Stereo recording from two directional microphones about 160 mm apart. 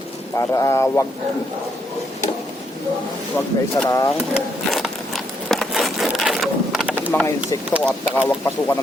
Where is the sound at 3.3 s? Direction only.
10° left (ahead or behind).